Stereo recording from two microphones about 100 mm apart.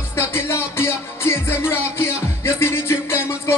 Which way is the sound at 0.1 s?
25° left (ahead or behind).